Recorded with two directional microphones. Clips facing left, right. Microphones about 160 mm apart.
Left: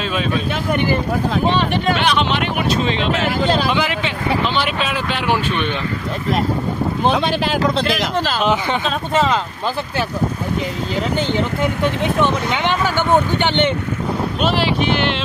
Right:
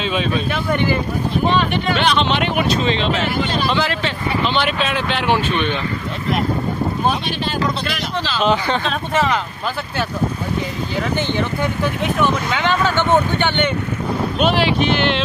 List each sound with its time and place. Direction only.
0.0 s speech: 5° left (ahead or behind)
2.1 s speech: 5° left (ahead or behind)
7.5 s speech: 90° left
8.5 s speech: 15° left (ahead or behind)
12.0 s speech: 20° left (ahead or behind)
14.4 s speech: 5° left (ahead or behind)